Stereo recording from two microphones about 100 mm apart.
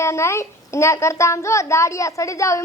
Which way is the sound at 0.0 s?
30° left (ahead or behind).